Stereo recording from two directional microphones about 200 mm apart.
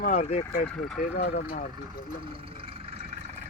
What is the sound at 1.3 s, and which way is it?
Speech, 50° left (ahead or behind).